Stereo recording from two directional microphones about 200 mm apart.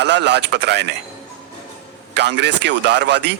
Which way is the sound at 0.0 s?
60° right (ahead or behind).